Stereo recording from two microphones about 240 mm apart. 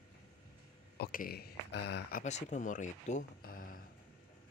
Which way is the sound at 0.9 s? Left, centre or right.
Left.